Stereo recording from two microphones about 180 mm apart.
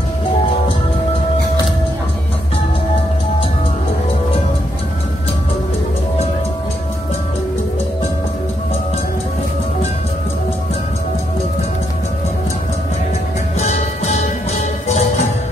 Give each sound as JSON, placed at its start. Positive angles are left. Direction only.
{"t": 13.6, "sound": "music", "side_deg": 40}